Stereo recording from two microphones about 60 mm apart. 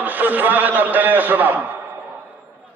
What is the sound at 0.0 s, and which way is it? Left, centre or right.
A man's voice, right.